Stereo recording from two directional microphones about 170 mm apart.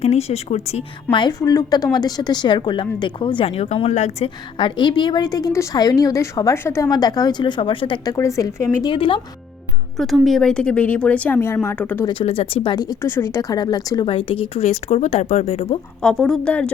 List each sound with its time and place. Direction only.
0.0 s a woman's voice: 40° left (ahead or behind)
1.1 s a woman's voice: 25° left (ahead or behind); by 4.3 s 40° left (ahead or behind)
4.5 s a woman's voice: 30° left (ahead or behind)
8.1 s a woman's voice: 20° left (ahead or behind)
8.9 s a woman's voice: 30° left (ahead or behind)
10.2 s a woman's voice: centre (ahead or behind)
12.2 s a woman's voice: 40° left (ahead or behind)
12.7 s a woman's voice: 25° left (ahead or behind)
16.0 s a woman's voice: 5° left (ahead or behind)